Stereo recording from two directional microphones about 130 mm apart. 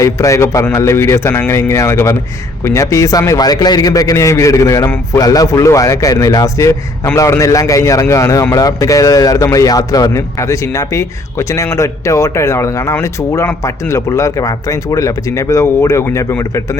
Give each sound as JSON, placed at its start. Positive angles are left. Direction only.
{"t": 0.0, "sound": "a man's voice", "side_deg": 25}